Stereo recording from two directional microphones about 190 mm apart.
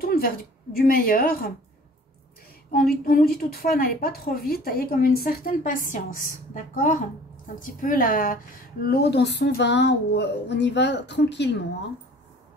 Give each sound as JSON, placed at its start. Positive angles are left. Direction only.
{"t": 0.0, "sound": "a sound", "side_deg": 50}
{"t": 0.9, "sound": "a woman's voice", "side_deg": 50}
{"t": 2.7, "sound": "a woman's voice", "side_deg": 50}